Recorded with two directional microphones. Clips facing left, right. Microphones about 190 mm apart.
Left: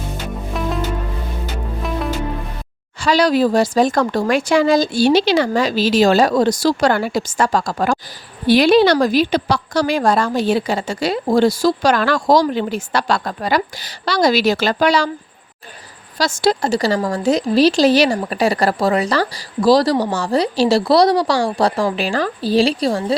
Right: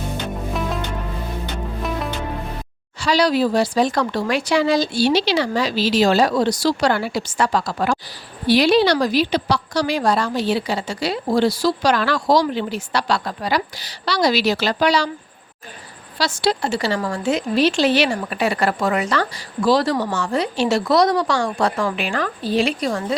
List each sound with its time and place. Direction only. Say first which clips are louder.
0.5 s music: left 5 dB; centre (ahead or behind)
3.0 s a woman's voice: left 3 dB; 50° left (ahead or behind)
16.1 s a woman's voice: left 4 dB; 45° left (ahead or behind)